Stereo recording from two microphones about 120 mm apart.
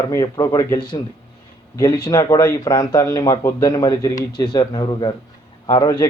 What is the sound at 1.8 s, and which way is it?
Speech, 30° left (ahead or behind).